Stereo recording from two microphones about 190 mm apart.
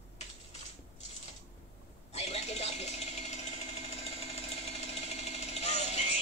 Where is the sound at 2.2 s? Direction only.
35° left (ahead or behind).